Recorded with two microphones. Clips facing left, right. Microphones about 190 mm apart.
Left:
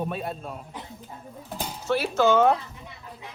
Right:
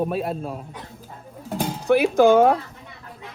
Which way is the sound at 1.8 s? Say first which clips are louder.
Right 7 dB; 15° right (ahead or behind).